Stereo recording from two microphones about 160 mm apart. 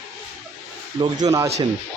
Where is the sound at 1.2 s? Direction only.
20° right (ahead or behind).